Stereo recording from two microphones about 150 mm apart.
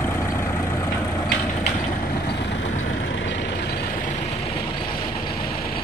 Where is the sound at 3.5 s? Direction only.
90° left; by 4.1 s 65° left (ahead or behind).